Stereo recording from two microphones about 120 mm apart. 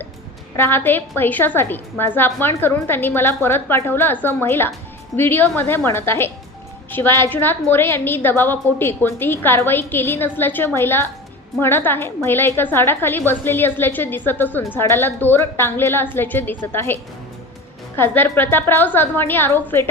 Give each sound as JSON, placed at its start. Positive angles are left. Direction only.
{"t": 0.5, "sound": "a woman's voice", "side_deg": 20}